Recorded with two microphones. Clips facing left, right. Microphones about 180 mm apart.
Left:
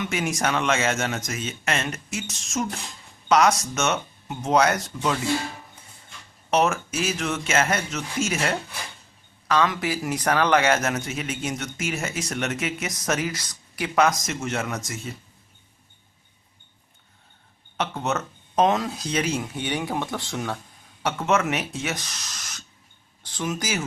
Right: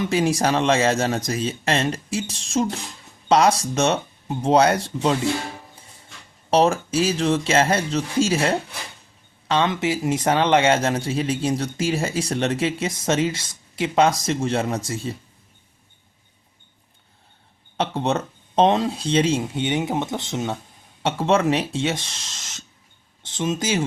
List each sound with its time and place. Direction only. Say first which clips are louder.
0.0 s speech: right 6 dB; 30° right (ahead or behind)
6.5 s speech: right 4 dB; 30° right (ahead or behind)
17.7 s speech: right 4 dB; 30° right (ahead or behind)